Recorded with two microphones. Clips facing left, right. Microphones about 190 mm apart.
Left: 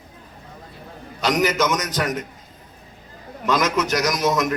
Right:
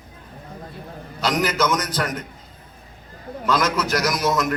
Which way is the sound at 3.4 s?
20° left (ahead or behind).